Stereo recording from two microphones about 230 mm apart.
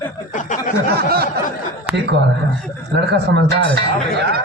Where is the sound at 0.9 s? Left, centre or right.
Right.